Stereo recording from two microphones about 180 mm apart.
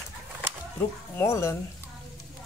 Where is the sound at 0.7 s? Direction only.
15° left (ahead or behind).